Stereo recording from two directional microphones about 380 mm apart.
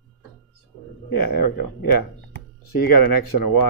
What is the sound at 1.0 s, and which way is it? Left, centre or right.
Speech, left.